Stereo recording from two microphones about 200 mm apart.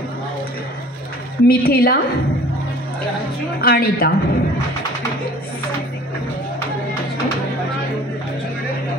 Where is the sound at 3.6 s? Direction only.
50° left (ahead or behind).